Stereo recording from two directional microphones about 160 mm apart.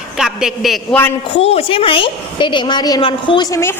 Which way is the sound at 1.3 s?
40° left (ahead or behind).